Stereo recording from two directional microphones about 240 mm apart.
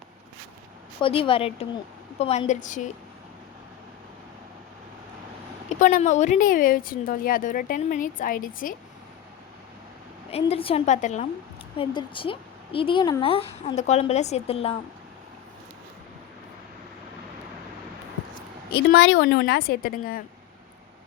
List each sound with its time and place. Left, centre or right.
1.0 s a woman's voice: left
5.6 s a woman's voice: left
10.3 s a woman's voice: left
18.7 s a woman's voice: left